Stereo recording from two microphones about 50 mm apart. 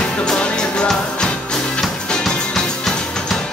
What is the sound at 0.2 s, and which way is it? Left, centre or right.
Music, centre.